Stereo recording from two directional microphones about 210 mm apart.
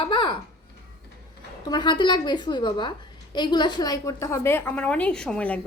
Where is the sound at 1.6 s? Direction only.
20° left (ahead or behind).